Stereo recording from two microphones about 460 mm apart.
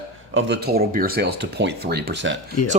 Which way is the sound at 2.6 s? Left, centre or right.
Left.